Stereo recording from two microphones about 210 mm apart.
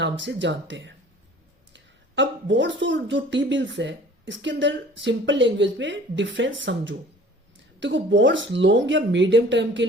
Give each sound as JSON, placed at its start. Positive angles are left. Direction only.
{"t": 0.0, "sound": "speech", "side_deg": -60}